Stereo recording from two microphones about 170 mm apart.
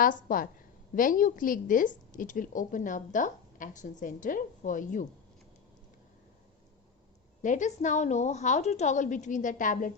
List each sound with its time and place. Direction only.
0.0 s a woman's voice: 55° left (ahead or behind)
7.4 s a woman's voice: 45° left (ahead or behind)